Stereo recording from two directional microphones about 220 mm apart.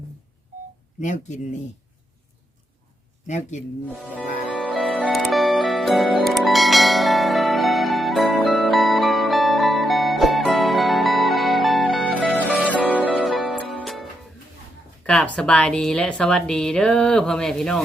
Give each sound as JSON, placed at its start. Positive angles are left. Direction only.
{"t": 0.9, "sound": "speech", "side_deg": 35}
{"t": 3.2, "sound": "speech", "side_deg": 30}
{"t": 3.8, "sound": "music", "side_deg": 0}
{"t": 4.5, "sound": "music", "side_deg": 5}
{"t": 15.0, "sound": "a woman's voice", "side_deg": 5}